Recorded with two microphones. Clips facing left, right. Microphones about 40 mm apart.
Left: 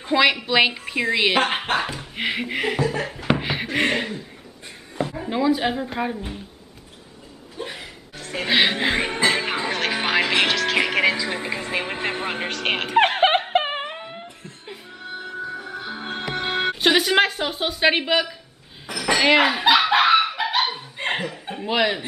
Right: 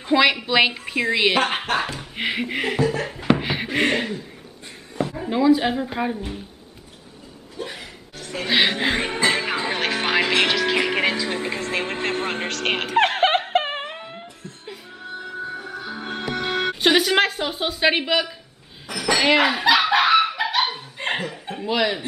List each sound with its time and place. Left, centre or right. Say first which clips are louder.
0.0 s a woman's voice: right 1 dB; centre
3.3 s a sound: right 1 dB; centre
4.9 s speech: right 1 dB; centre
8.2 s music: left 1 dB; left
8.5 s speech: even; centre
9.8 s music: even; centre
16.8 s a woman's voice: even; centre
20.0 s goose: even; centre
20.7 s laughter: even; centre
21.6 s speech: left 1 dB; centre